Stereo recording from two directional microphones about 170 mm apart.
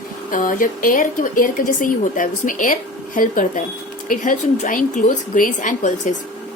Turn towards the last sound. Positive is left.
turn(degrees=45)  # may be behind; listen again after turning